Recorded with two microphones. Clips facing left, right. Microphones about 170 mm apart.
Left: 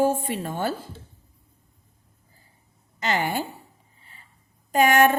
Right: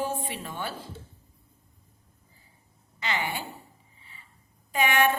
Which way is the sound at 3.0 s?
45° left (ahead or behind).